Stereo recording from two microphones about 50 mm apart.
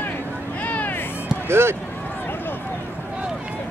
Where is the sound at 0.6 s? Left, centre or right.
Left.